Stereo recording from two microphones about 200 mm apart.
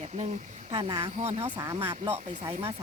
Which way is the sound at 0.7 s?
30° right (ahead or behind).